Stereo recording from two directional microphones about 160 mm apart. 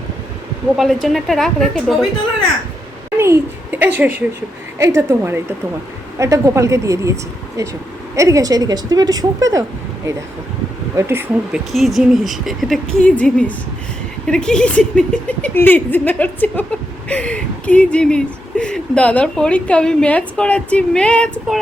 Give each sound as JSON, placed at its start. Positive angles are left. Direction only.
{"t": 1.0, "sound": "speech", "side_deg": 0}
{"t": 3.2, "sound": "a child's voice", "side_deg": -15}
{"t": 10.9, "sound": "speech", "side_deg": -15}
{"t": 11.7, "sound": "speech", "side_deg": 0}